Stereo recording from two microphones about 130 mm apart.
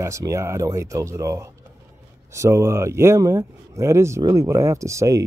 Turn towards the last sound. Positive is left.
turn(degrees=-25)  # may be behind; listen again after turning